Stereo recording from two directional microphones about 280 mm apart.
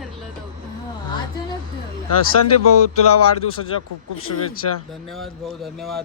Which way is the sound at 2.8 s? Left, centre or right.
Left.